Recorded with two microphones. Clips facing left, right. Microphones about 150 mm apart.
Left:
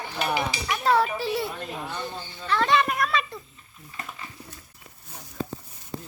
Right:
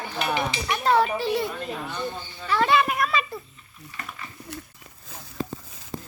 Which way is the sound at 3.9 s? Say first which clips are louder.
Left 1 dB; 80° right.